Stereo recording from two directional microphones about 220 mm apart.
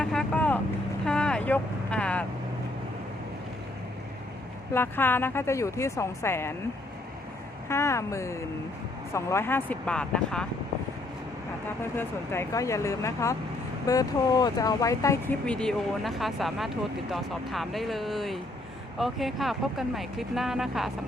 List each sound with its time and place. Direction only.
0.0 s vehicle: 5° left (ahead or behind)
4.7 s speech: 10° left (ahead or behind)
7.7 s speech: 10° left (ahead or behind)
11.9 s speech: 10° left (ahead or behind)